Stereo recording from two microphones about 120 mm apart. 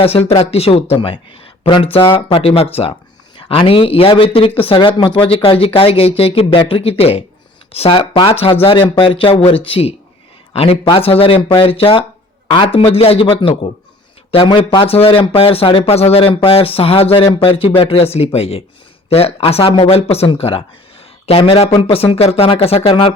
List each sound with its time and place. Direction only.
0.0 s speech: 55° left (ahead or behind)